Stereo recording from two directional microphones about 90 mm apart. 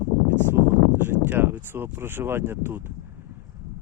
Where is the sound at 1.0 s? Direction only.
25° right (ahead or behind).